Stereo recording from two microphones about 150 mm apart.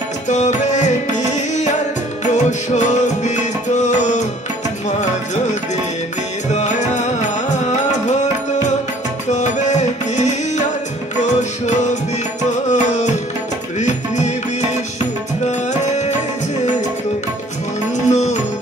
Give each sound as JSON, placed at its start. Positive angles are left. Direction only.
{"t": 0.3, "sound": "music", "side_deg": 55}
{"t": 17.9, "sound": "music", "side_deg": 50}